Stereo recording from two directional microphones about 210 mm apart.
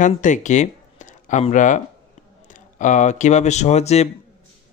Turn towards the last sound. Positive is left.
turn(degrees=30)  # may be behind; listen again after turning